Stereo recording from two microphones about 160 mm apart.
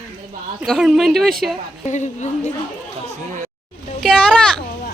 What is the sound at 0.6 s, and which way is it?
Speech, centre (ahead or behind).